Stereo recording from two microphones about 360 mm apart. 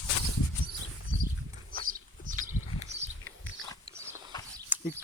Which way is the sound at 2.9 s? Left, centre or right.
Centre.